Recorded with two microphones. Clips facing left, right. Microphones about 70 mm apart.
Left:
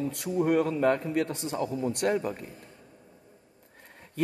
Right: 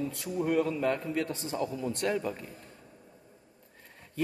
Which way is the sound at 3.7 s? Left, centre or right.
Left.